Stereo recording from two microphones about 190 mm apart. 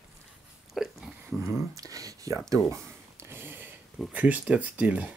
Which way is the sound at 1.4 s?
15° right (ahead or behind).